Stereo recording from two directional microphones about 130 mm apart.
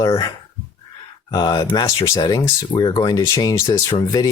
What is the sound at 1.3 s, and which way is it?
Speech, 35° left (ahead or behind).